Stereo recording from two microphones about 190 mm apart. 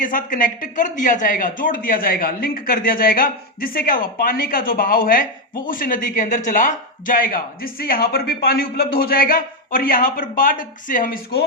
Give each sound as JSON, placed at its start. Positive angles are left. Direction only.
{"t": 0.0, "sound": "speech", "side_deg": 45}